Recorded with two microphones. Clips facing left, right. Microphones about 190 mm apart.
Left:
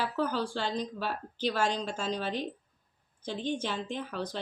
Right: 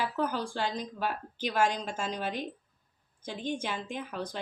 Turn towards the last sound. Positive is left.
turn(degrees=-10)  # may be behind; listen again after turning